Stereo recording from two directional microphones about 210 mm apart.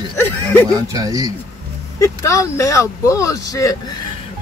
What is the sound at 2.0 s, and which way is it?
Speech, 15° left (ahead or behind).